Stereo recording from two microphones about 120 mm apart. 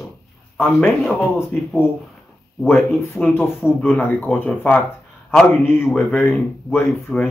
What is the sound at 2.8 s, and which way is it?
Speech, 20° left (ahead or behind).